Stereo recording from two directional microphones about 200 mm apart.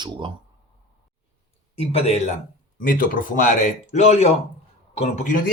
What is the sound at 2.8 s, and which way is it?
Speech, 45° left (ahead or behind).